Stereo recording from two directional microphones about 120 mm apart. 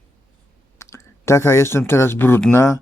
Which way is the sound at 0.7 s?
20° left (ahead or behind).